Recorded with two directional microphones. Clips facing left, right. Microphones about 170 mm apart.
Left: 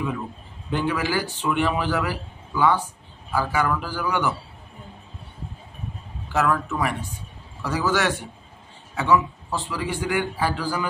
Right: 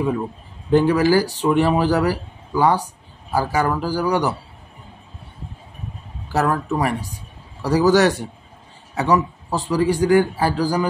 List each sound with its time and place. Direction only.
0.7 s a man's voice: 40° right (ahead or behind)
6.2 s a man's voice: 35° right (ahead or behind)